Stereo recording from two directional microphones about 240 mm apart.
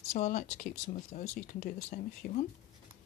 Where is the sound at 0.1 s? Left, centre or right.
Left.